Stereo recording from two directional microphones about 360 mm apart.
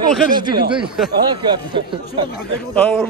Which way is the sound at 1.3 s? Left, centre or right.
Centre.